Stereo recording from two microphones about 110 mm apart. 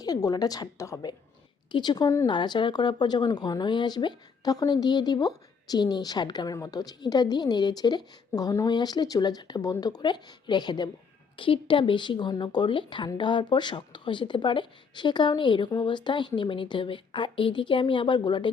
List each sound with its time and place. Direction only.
0.0 s speech: 35° left (ahead or behind)